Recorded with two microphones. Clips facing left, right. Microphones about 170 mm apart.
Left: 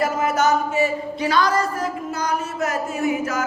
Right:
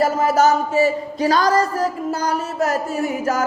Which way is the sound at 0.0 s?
30° right (ahead or behind).